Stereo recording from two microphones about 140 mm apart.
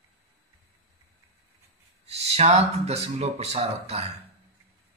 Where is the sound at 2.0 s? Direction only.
50° right (ahead or behind).